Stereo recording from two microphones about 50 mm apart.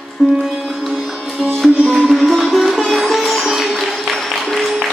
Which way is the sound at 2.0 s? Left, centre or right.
Centre.